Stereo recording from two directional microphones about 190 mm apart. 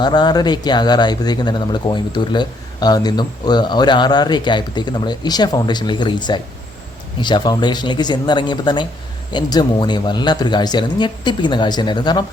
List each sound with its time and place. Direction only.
0.0 s speech: 20° left (ahead or behind)